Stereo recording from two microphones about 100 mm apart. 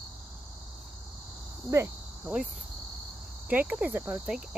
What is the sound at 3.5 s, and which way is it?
Cricket, 15° right (ahead or behind).